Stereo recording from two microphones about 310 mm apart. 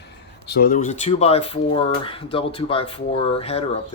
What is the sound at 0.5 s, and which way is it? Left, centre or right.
Speech, left.